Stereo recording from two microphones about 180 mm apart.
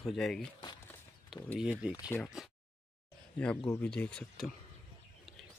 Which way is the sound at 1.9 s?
15° left (ahead or behind).